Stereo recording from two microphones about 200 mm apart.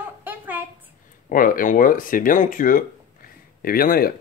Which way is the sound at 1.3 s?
45° left (ahead or behind).